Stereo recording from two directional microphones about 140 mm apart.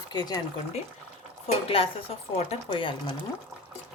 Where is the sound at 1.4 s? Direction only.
45° left (ahead or behind).